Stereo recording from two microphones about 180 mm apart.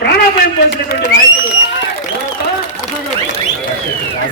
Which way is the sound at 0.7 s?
75° left (ahead or behind).